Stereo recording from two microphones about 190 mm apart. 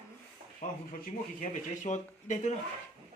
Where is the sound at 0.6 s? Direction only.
45° left (ahead or behind).